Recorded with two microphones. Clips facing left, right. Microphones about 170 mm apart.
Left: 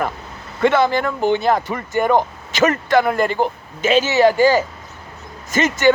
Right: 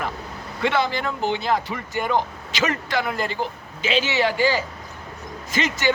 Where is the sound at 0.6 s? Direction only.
50° left (ahead or behind).